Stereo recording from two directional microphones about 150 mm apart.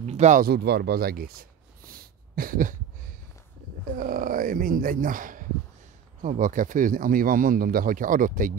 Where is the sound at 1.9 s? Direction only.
75° right (ahead or behind).